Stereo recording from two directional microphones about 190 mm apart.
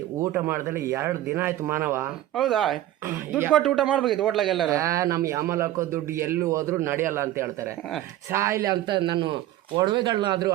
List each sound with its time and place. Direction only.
0.2 s speech: 10° right (ahead or behind)
2.3 s a man's voice: centre (ahead or behind)
3.1 s speech: 10° right (ahead or behind)
3.6 s a man's voice: centre (ahead or behind)
4.7 s a man's voice: 15° right (ahead or behind)